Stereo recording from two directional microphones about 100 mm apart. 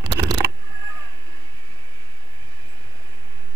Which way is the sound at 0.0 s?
45° right (ahead or behind).